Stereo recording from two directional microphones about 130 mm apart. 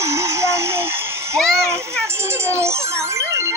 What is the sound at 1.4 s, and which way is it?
Speech, 5° left (ahead or behind).